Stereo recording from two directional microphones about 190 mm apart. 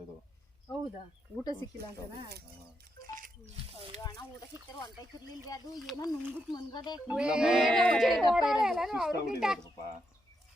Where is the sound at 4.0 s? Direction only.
20° left (ahead or behind).